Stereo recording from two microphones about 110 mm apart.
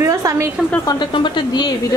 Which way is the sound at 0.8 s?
40° left (ahead or behind).